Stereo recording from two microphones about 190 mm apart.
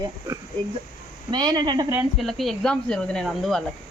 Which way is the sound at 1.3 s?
25° right (ahead or behind).